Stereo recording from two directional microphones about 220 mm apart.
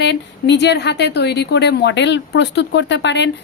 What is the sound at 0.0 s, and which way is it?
Speech, 50° left (ahead or behind).